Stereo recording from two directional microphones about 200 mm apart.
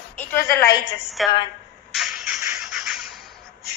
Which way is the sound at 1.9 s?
Centre (ahead or behind).